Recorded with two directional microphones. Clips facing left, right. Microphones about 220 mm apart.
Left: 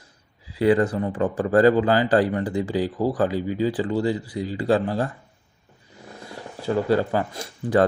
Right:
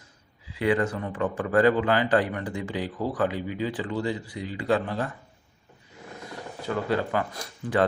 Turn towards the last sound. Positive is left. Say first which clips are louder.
# left 5 dB
turn(degrees=30)  # may be behind; listen again after turning